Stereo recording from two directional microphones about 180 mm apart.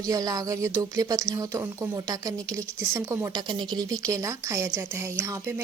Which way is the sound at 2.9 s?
15° right (ahead or behind).